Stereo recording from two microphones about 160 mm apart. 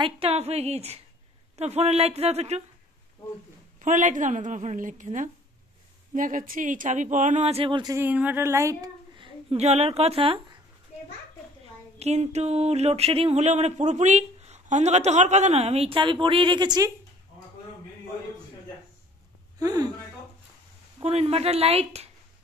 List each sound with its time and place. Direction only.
0.0 s speech: 40° right (ahead or behind)
3.8 s a sound: 55° right (ahead or behind); by 7.9 s 30° right (ahead or behind)
7.9 s speech: 10° right (ahead or behind)
9.1 s a woman's voice: 35° right (ahead or behind)
12.0 s a sound: 45° right (ahead or behind); by 16.9 s 25° right (ahead or behind)
19.6 s speech: 25° right (ahead or behind)
21.0 s speech: 40° right (ahead or behind)